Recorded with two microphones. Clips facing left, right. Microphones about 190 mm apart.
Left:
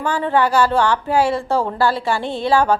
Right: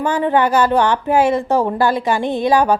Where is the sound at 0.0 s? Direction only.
20° right (ahead or behind).